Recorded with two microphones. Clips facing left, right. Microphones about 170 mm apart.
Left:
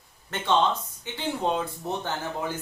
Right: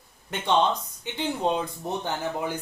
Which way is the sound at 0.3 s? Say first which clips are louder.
Right 1 dB; 15° right (ahead or behind).